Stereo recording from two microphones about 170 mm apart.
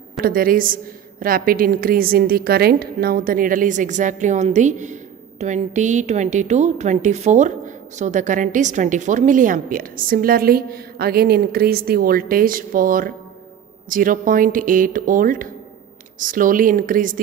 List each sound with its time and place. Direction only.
0.2 s a woman's voice: 55° right (ahead or behind)